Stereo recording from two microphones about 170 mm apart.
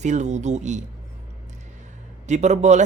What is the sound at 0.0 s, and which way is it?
Speech, 45° right (ahead or behind).